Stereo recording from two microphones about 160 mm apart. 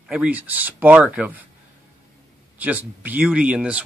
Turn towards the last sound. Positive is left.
turn(degrees=-5)  # may be behind; listen again after turning